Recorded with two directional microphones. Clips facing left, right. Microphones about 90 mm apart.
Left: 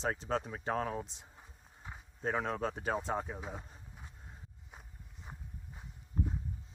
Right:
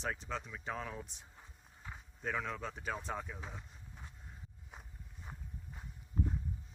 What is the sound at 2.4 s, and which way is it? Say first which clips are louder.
Speech: left 6 dB; 40° left (ahead or behind).